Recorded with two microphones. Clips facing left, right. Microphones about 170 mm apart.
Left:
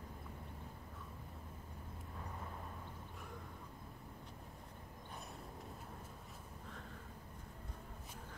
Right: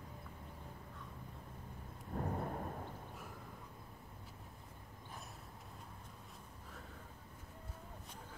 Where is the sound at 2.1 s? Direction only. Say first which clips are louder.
Right 11 dB; 50° right (ahead or behind).